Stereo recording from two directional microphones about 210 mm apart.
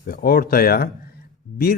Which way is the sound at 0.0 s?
45° left (ahead or behind).